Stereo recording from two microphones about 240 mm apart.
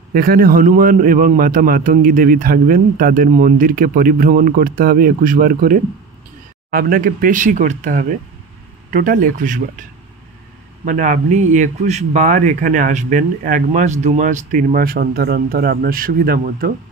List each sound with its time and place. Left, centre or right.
0.1 s speech: right
10.9 s speech: right